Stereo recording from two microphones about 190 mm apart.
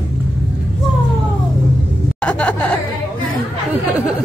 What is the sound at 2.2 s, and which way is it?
Chuckle, 5° left (ahead or behind).